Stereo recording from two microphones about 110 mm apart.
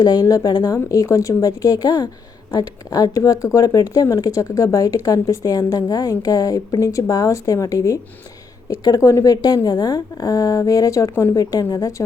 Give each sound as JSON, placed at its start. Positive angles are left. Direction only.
{"t": 0.0, "sound": "a woman's voice", "side_deg": 35}